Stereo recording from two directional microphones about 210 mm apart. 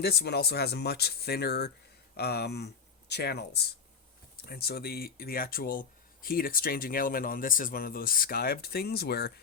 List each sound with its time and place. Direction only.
0.0 s speech: 50° left (ahead or behind)